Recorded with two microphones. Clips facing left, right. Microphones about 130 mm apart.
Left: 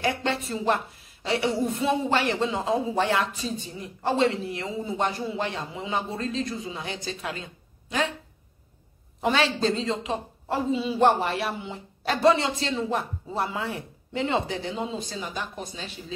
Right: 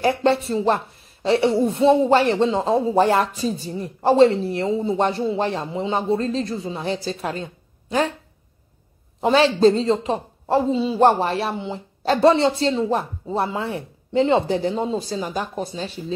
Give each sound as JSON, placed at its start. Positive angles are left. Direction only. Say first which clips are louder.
{"t": 0.0, "sound": "a woman's voice", "louder": "right 8 dB", "side_deg": -35}
{"t": 9.2, "sound": "a woman's voice", "louder": "right 9 dB", "side_deg": -30}